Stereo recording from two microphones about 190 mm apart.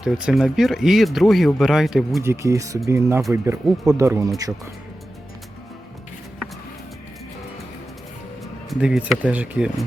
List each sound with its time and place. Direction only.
0.0 s speech: 5° right (ahead or behind)
2.2 s speech: 15° right (ahead or behind)
8.7 s speech: 5° right (ahead or behind)